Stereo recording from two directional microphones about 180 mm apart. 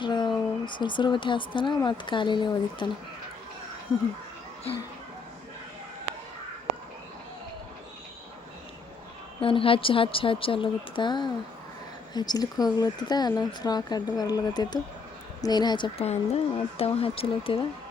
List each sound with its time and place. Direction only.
0.0 s speech: 25° left (ahead or behind)
9.4 s speech: 30° left (ahead or behind)